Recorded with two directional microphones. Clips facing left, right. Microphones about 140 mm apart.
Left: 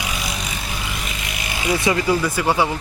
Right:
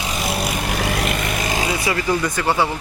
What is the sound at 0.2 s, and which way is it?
Vehicle, 60° right (ahead or behind).